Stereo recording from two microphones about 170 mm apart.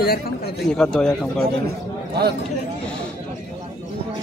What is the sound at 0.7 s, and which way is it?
Speech, 5° left (ahead or behind).